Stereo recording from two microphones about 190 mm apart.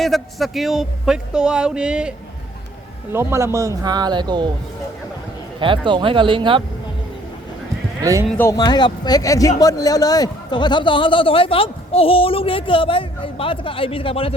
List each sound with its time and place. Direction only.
0.0 s a man's voice: centre (ahead or behind); by 4.4 s 25° right (ahead or behind)
5.5 s speech: 25° right (ahead or behind)
8.0 s speech: 15° right (ahead or behind)
8.3 s a man's voice: 15° left (ahead or behind); by 14.3 s 30° left (ahead or behind)